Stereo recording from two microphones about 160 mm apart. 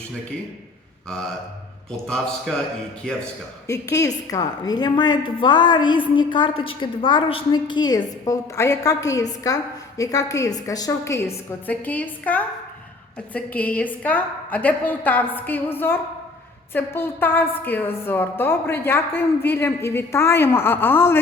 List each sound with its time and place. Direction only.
1.9 s a man's voice: 5° left (ahead or behind)
3.9 s a woman's voice: 20° left (ahead or behind)